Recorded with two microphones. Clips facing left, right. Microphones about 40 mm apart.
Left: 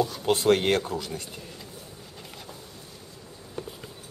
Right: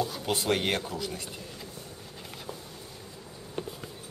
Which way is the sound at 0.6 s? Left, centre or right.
Centre.